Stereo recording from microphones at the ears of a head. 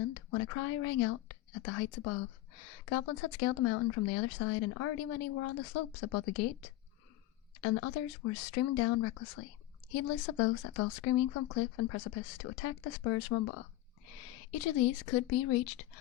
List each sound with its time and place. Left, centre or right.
0.0 s a woman's voice: left